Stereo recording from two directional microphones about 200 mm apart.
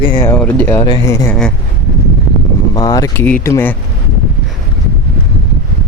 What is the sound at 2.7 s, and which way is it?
Speech, 20° left (ahead or behind).